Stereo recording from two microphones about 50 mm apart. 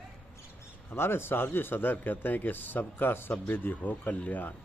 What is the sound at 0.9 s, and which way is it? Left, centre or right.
A man's voice, left.